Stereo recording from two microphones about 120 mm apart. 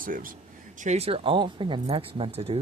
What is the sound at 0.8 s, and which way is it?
Speech, 70° right (ahead or behind).